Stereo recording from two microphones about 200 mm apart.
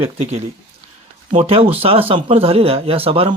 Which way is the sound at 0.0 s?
35° right (ahead or behind).